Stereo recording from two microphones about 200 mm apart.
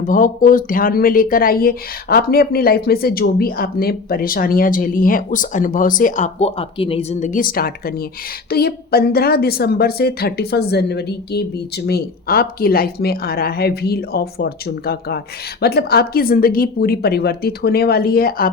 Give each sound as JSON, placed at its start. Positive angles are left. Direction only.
{"t": 0.1, "sound": "speech", "side_deg": 40}